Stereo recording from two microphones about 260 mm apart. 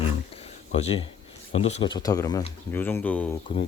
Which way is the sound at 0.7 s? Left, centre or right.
Left.